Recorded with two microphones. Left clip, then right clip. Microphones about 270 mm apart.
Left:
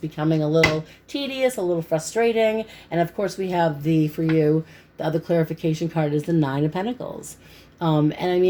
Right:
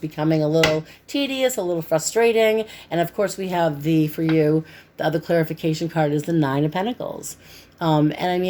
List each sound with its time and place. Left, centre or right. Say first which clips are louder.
0.2 s speech: right 1 dB; right